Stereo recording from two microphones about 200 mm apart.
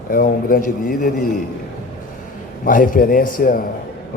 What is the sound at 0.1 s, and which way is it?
A man's voice, 45° left (ahead or behind).